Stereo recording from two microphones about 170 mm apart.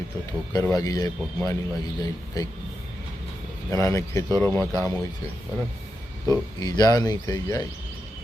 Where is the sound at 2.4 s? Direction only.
20° left (ahead or behind).